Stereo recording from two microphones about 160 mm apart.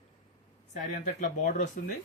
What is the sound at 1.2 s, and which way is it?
Speech, 50° left (ahead or behind).